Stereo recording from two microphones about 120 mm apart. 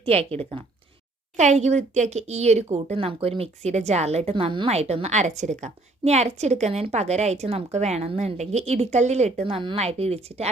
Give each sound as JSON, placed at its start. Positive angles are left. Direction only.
{"t": 0.0, "sound": "speech", "side_deg": -55}
{"t": 1.4, "sound": "speech", "side_deg": -75}
{"t": 9.7, "sound": "speech", "side_deg": -60}